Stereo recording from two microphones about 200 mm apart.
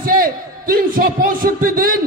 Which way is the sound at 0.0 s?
45° right (ahead or behind).